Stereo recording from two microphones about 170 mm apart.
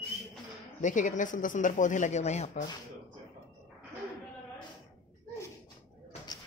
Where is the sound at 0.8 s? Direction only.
50° left (ahead or behind).